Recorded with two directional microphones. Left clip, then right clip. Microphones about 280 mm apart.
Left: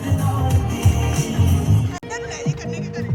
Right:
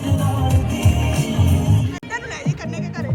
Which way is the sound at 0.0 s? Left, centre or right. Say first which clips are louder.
Right 1 dB; right.